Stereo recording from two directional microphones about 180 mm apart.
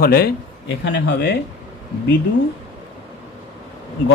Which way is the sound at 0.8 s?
75° left (ahead or behind).